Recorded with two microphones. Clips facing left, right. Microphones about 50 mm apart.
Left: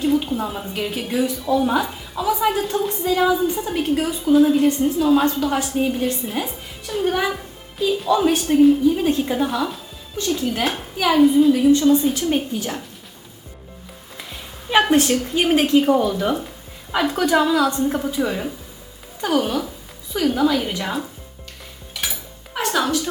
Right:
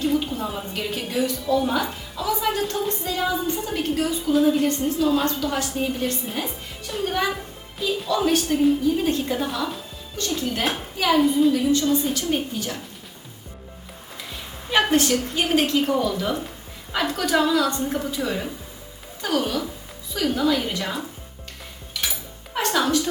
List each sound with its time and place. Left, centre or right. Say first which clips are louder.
0.0 s a woman's voice: left 3 dB; centre
4.4 s a woman's voice: left 4 dB; centre
10.9 s a woman's voice: left 5 dB; centre
12.1 s a woman's voice: left 3 dB; left
14.7 s a woman's voice: left 3 dB; centre
22.5 s a sound: left 1 dB; centre